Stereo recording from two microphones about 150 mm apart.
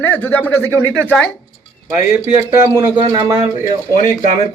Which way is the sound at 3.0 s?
25° right (ahead or behind).